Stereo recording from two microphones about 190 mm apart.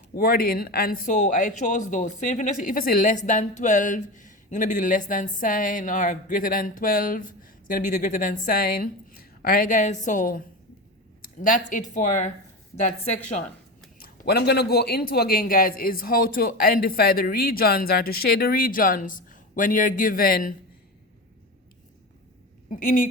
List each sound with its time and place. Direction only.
0.2 s a woman's voice: 50° left (ahead or behind); by 13.4 s 35° left (ahead or behind)
14.0 s speech: 55° left (ahead or behind)
22.7 s speech: 45° left (ahead or behind)